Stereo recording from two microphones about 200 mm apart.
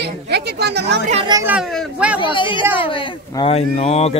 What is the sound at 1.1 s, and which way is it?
Speech, 25° right (ahead or behind).